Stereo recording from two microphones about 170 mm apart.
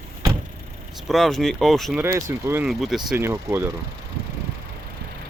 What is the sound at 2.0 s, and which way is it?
Speech, 10° right (ahead or behind).